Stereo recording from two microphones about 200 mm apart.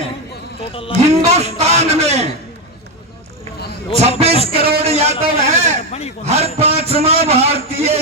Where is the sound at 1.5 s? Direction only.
35° right (ahead or behind).